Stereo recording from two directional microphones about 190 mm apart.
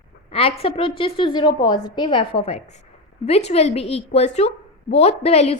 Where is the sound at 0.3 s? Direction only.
30° left (ahead or behind).